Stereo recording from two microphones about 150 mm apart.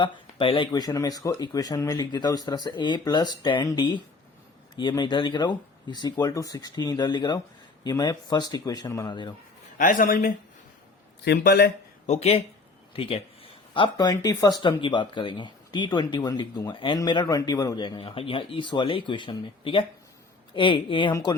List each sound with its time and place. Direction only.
0.0 s speech: 35° left (ahead or behind)
9.7 s speech: 60° left (ahead or behind)
11.3 s a man's voice: 90° left
12.0 s speech: 50° left (ahead or behind)
13.0 s speech: 40° left (ahead or behind)